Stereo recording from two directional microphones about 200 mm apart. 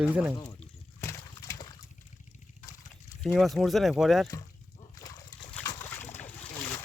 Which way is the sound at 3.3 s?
Centre (ahead or behind).